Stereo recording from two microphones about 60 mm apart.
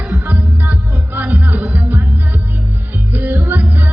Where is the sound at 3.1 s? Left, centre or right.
Right.